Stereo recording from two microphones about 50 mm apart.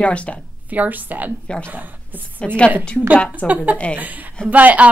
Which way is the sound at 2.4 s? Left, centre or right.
Left.